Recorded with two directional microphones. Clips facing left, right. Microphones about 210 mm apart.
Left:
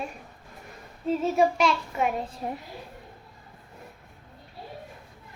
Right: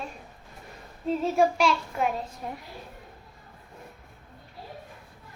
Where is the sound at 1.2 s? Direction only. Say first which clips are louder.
Even; centre (ahead or behind).